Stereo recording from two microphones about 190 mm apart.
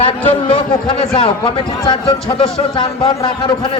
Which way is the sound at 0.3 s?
30° left (ahead or behind).